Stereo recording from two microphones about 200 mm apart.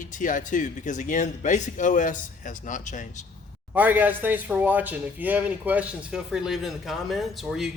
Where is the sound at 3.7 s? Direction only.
10° right (ahead or behind).